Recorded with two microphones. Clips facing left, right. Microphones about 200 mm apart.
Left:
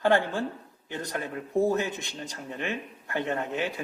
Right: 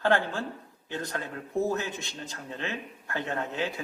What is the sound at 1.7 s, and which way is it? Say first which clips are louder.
A woman's voice: left 3 dB; 15° left (ahead or behind).